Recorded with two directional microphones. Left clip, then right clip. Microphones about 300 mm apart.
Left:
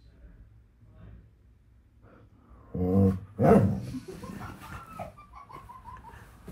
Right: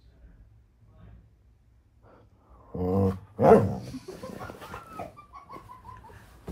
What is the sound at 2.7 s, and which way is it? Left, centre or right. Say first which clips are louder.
Dog: even; left.